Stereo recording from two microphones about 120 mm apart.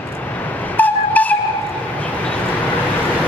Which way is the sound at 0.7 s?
15° left (ahead or behind).